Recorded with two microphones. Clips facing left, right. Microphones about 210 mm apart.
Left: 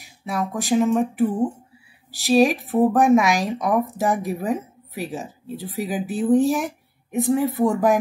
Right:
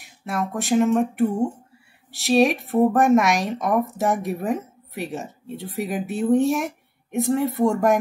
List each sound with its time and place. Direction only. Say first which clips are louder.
0.0 s speech: left 1 dB; centre (ahead or behind)